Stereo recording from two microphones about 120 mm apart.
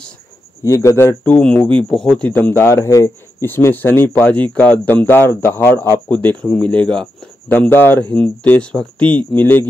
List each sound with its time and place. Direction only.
0.7 s speech: 25° left (ahead or behind)
1.3 s speech: 10° left (ahead or behind)